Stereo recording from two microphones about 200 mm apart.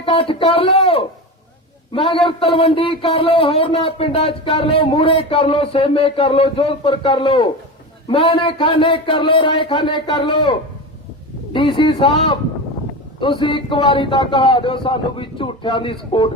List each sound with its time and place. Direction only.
0.0 s a man's voice: 25° left (ahead or behind)
11.8 s a man's voice: 25° left (ahead or behind)